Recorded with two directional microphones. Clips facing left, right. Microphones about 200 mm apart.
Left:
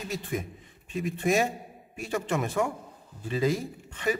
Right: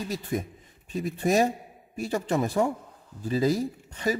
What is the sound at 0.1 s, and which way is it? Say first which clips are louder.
Speech: right 2 dB; 40° right (ahead or behind).